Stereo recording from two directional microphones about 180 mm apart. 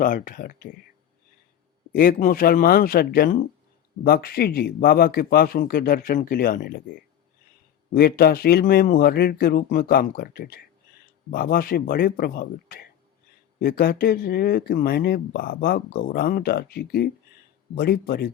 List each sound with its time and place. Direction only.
0.0 s a man's voice: 50° left (ahead or behind)
1.9 s a man's voice: 50° left (ahead or behind)
7.9 s speech: 60° left (ahead or behind)